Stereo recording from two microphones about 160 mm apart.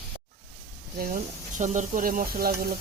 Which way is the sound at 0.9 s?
60° right (ahead or behind).